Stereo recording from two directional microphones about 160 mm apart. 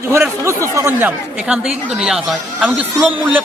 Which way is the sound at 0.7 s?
15° right (ahead or behind).